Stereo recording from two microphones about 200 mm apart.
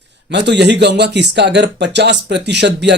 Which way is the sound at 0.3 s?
60° right (ahead or behind).